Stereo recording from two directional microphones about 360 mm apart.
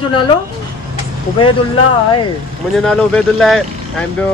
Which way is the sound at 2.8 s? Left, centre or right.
Centre.